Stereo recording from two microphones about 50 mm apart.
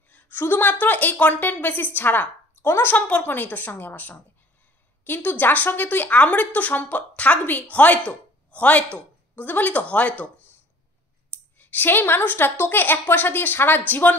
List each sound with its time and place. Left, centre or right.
0.1 s a woman's voice: left
11.5 s a woman's voice: left